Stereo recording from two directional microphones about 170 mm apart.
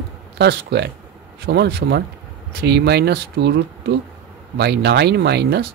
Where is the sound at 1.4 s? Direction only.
75° right (ahead or behind).